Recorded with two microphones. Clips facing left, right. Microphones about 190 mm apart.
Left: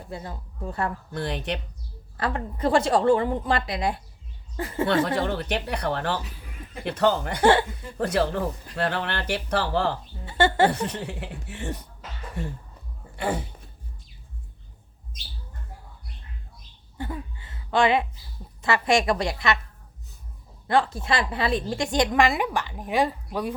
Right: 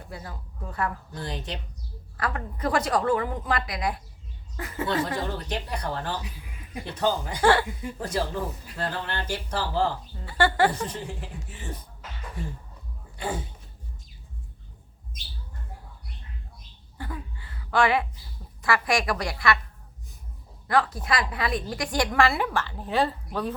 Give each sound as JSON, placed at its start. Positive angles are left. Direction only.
{"t": 0.1, "sound": "a woman's voice", "side_deg": 25}
{"t": 1.1, "sound": "speech", "side_deg": 65}
{"t": 2.1, "sound": "a woman's voice", "side_deg": 25}
{"t": 5.0, "sound": "speech", "side_deg": 70}
{"t": 10.2, "sound": "a woman's voice", "side_deg": 25}
{"t": 10.7, "sound": "speech", "side_deg": 70}
{"t": 13.1, "sound": "a sound", "side_deg": 65}
{"t": 17.0, "sound": "a sound", "side_deg": 20}
{"t": 18.6, "sound": "a woman's voice", "side_deg": 25}
{"t": 20.7, "sound": "a woman's voice", "side_deg": 25}